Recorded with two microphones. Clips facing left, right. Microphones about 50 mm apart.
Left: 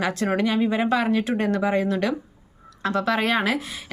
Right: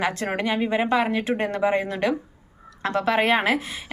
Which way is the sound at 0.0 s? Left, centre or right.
Right.